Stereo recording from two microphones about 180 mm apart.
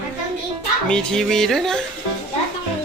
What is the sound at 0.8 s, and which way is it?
Speech, 5° left (ahead or behind).